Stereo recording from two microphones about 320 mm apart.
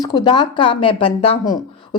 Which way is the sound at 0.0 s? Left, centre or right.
Centre.